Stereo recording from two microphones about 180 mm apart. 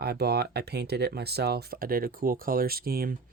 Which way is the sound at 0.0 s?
60° right (ahead or behind).